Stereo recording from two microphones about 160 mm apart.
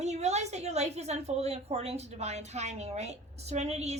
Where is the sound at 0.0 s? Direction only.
45° right (ahead or behind).